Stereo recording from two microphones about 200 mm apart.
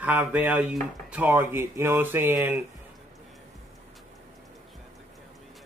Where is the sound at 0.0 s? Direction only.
5° right (ahead or behind).